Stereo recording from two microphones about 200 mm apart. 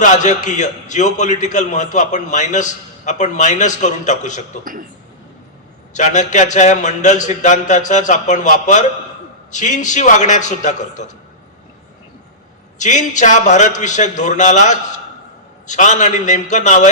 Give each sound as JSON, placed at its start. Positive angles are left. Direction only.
{"t": 0.0, "sound": "a man's voice", "side_deg": 35}
{"t": 5.9, "sound": "a man's voice", "side_deg": 35}
{"t": 12.8, "sound": "a man's voice", "side_deg": 35}